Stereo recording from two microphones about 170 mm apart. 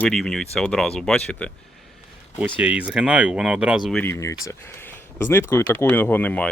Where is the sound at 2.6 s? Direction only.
5° right (ahead or behind).